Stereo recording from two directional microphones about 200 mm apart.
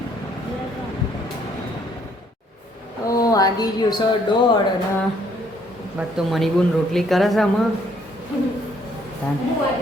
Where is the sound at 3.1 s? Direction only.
15° left (ahead or behind).